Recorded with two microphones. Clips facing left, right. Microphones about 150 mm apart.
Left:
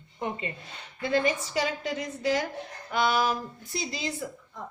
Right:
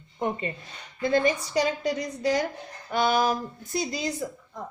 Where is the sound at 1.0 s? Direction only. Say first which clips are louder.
Right 3 dB; 40° right (ahead or behind).